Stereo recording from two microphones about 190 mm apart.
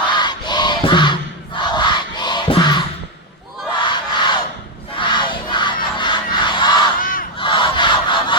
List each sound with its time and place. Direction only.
0.0 s battle cry: 25° left (ahead or behind)
3.8 s crowd: 25° left (ahead or behind)
7.0 s battle cry: 45° left (ahead or behind)
7.3 s battle cry: 25° left (ahead or behind)